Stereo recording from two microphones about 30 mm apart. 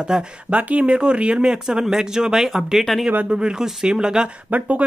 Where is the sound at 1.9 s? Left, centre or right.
Right.